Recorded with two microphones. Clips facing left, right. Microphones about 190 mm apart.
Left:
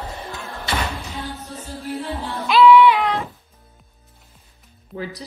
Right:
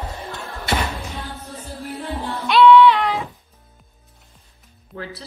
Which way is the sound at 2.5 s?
5° left (ahead or behind).